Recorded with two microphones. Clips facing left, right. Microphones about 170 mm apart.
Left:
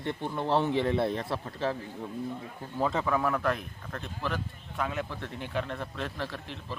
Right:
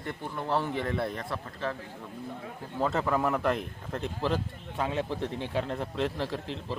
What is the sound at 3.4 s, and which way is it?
Speech, 25° right (ahead or behind).